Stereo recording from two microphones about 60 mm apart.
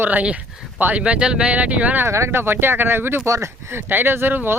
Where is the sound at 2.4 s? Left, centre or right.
Right.